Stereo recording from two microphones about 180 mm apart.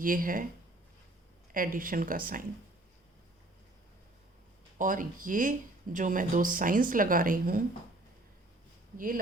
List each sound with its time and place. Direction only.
0.0 s speech: 50° right (ahead or behind)
1.5 s speech: 50° right (ahead or behind)
4.8 s speech: 45° right (ahead or behind)